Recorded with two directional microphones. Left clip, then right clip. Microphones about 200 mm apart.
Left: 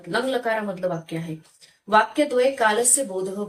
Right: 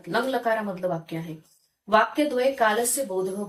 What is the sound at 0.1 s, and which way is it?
Speech, 10° left (ahead or behind).